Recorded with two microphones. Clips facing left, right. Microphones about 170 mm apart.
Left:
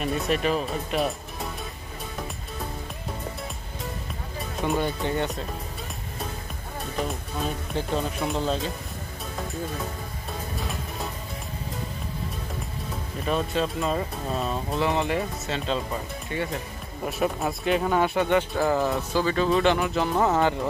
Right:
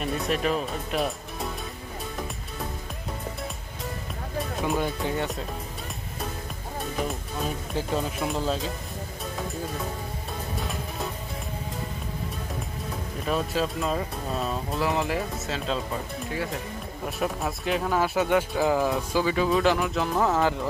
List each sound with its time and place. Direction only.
0.0 s speech: centre (ahead or behind)
4.6 s speech: centre (ahead or behind)
7.7 s speech: 5° right (ahead or behind)
13.3 s speech: centre (ahead or behind)